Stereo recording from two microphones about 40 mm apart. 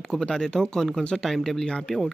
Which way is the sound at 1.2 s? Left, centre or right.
Centre.